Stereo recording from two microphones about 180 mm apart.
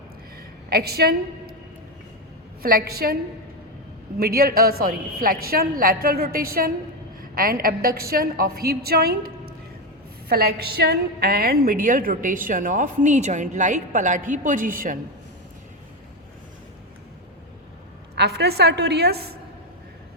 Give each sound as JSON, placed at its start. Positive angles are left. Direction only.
{"t": 0.3, "sound": "a sound", "side_deg": -60}
{"t": 2.6, "sound": "a woman's voice", "side_deg": -55}
{"t": 4.2, "sound": "a woman's voice", "side_deg": -55}
{"t": 18.1, "sound": "a woman's voice", "side_deg": -65}